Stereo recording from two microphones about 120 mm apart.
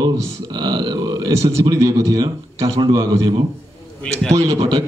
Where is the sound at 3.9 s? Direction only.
10° left (ahead or behind).